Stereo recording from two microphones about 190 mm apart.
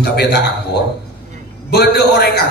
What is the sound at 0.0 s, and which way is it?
Speech, 60° left (ahead or behind).